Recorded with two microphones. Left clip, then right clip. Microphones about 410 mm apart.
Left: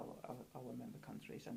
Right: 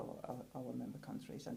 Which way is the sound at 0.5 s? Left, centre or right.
Right.